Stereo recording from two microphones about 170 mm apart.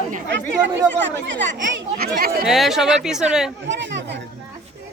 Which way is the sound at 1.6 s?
75° right (ahead or behind).